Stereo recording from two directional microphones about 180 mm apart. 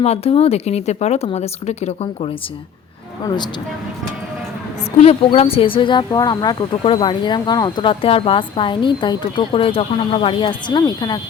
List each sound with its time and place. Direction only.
0.0 s speech: 35° left (ahead or behind)
3.2 s speech: 25° left (ahead or behind)
4.9 s speech: 35° left (ahead or behind)